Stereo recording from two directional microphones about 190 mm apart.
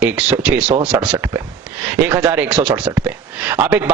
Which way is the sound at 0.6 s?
35° right (ahead or behind).